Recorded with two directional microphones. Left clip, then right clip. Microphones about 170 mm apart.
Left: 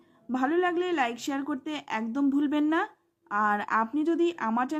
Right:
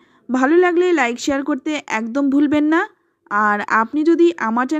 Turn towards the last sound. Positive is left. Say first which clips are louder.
# right 10 dB
turn(degrees=-30)  # may be behind; listen again after turning